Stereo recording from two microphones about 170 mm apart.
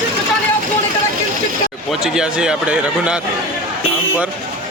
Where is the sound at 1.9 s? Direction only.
5° right (ahead or behind).